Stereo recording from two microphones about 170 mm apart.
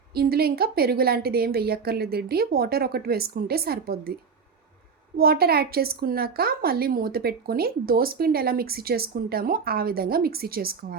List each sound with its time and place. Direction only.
0.1 s a woman's voice: 65° right (ahead or behind)
5.1 s a woman's voice: 65° right (ahead or behind)